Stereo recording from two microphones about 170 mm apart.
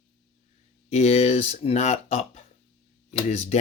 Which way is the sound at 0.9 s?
40° left (ahead or behind).